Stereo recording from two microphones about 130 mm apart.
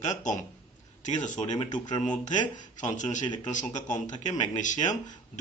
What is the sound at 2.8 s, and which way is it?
Speech, 70° left (ahead or behind).